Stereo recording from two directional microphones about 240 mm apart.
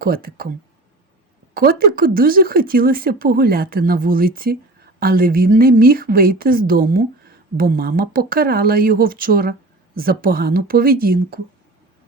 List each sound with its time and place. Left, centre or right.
0.0 s speech: right
1.5 s speech: right